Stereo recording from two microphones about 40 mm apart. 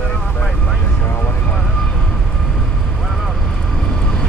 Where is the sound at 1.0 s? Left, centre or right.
Left.